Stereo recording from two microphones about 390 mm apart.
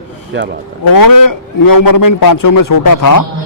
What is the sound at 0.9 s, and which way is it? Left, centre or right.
A man's voice, left.